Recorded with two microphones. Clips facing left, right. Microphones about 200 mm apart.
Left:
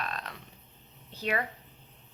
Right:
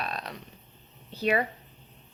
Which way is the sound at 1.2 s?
20° right (ahead or behind).